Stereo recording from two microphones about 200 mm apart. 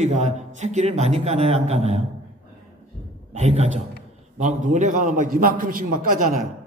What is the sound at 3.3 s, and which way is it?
A man's voice, 35° right (ahead or behind).